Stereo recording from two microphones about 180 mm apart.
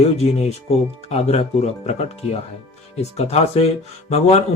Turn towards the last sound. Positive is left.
turn(degrees=35)  # may be behind; listen again after turning